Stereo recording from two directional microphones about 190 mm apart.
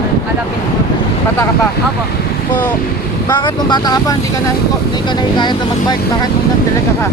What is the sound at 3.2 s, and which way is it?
Speech, 25° left (ahead or behind).